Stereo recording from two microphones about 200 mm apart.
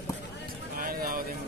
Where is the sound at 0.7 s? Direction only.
45° right (ahead or behind).